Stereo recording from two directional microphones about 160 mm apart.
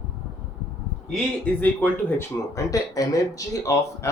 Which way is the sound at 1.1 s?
10° left (ahead or behind).